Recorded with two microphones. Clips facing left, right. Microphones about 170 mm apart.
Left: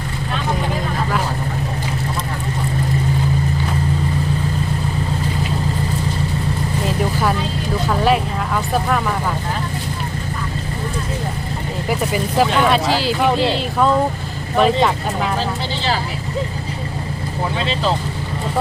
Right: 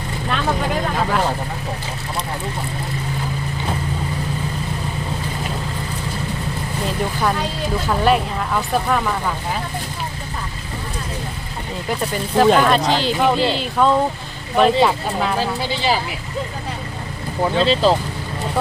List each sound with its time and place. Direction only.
6.8 s vehicle: 5° left (ahead or behind)
11.9 s speech: 5° left (ahead or behind); by 16.0 s 10° right (ahead or behind)
17.6 s speech: 35° right (ahead or behind)